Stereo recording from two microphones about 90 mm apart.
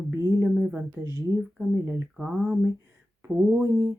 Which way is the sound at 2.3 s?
15° right (ahead or behind).